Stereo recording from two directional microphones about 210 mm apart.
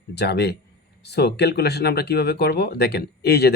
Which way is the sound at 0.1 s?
50° left (ahead or behind).